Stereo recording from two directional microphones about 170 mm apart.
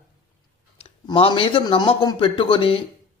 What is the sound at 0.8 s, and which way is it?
A man's voice, 35° left (ahead or behind).